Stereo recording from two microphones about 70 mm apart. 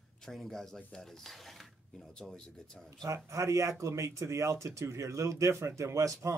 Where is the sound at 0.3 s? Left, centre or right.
Centre.